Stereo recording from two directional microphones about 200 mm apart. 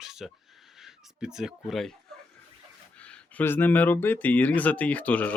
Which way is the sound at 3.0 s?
5° left (ahead or behind).